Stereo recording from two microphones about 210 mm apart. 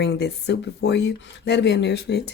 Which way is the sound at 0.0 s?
50° left (ahead or behind).